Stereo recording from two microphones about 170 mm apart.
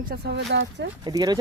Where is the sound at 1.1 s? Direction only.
25° right (ahead or behind).